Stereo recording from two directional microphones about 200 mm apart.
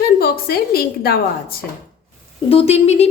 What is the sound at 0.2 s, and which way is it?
A woman's voice, 50° left (ahead or behind).